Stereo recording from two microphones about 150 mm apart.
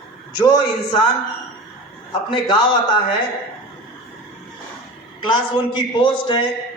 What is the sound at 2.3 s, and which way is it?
Speech, 30° left (ahead or behind).